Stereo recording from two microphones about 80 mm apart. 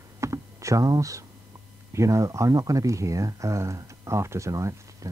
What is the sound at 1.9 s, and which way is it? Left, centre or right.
Speech, right.